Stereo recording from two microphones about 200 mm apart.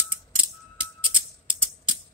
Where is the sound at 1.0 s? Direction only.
25° right (ahead or behind).